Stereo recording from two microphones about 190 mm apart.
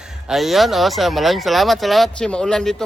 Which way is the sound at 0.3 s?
Centre (ahead or behind).